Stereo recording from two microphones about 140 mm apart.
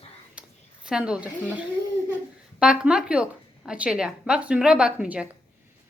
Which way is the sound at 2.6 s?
5° right (ahead or behind).